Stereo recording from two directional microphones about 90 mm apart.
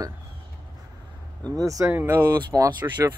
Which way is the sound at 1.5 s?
40° right (ahead or behind).